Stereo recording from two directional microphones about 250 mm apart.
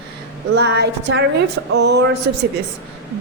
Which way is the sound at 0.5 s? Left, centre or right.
Right.